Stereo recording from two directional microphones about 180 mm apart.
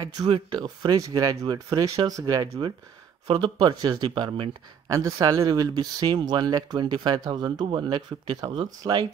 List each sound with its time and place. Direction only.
0.0 s speech: 25° right (ahead or behind)